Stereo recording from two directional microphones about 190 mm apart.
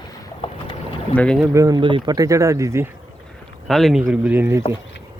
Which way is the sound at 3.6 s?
Centre (ahead or behind).